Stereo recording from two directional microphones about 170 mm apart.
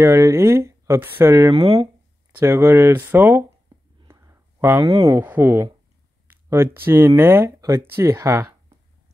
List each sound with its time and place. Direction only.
0.0 s speech: 15° right (ahead or behind)
1.6 s speech: 35° right (ahead or behind)
2.3 s speech: 15° right (ahead or behind)